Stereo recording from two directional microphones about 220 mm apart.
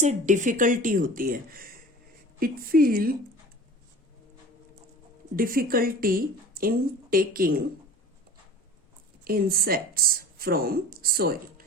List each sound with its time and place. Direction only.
0.0 s a woman's voice: 35° right (ahead or behind)
5.4 s a woman's voice: 40° right (ahead or behind)
9.2 s speech: 40° right (ahead or behind)